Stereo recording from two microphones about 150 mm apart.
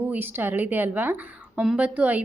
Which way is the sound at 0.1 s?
15° right (ahead or behind).